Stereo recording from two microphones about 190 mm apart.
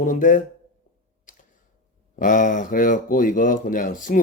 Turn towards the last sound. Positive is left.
turn(degrees=45)  # may be behind; listen again after turning